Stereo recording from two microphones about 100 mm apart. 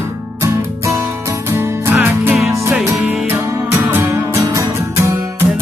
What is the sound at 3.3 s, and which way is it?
Music, 25° right (ahead or behind).